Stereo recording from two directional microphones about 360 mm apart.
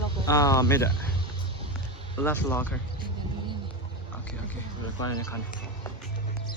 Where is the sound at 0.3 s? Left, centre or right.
Centre.